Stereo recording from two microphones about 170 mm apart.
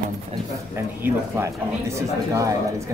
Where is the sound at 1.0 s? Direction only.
15° right (ahead or behind).